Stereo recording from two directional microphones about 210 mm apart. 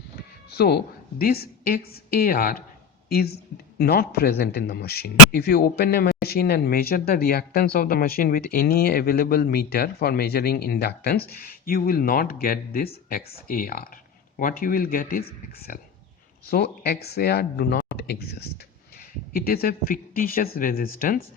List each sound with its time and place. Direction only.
0.5 s a man's voice: 50° left (ahead or behind)
16.5 s a man's voice: 45° left (ahead or behind)